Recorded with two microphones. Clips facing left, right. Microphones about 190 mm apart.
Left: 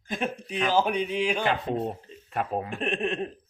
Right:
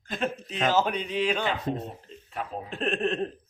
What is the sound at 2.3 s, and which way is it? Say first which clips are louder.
Speech: left 6 dB; 60° left (ahead or behind).